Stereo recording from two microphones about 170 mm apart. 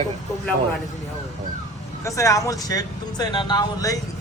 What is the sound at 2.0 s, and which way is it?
Speech, 20° left (ahead or behind).